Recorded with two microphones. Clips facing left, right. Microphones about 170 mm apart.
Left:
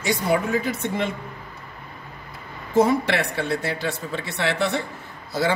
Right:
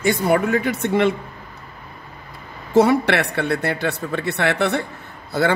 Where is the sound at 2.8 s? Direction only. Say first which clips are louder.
Right 4 dB; 70° right (ahead or behind).